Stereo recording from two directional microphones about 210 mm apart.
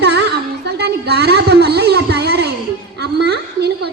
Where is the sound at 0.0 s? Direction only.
55° right (ahead or behind).